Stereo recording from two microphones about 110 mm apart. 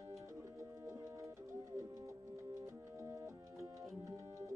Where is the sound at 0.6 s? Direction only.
30° right (ahead or behind).